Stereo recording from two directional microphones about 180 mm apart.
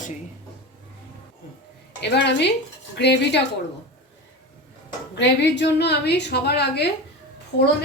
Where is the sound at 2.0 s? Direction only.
70° left (ahead or behind).